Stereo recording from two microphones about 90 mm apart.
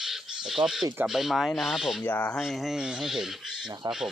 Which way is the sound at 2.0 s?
20° left (ahead or behind).